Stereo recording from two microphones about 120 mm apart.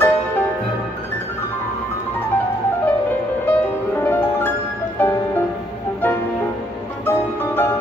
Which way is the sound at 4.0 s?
20° left (ahead or behind).